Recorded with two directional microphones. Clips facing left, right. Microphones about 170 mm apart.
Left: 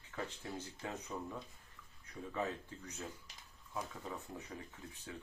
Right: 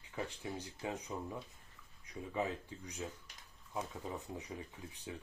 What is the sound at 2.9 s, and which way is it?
Speech, 15° right (ahead or behind).